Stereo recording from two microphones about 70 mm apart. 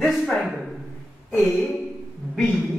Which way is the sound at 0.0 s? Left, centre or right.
Centre.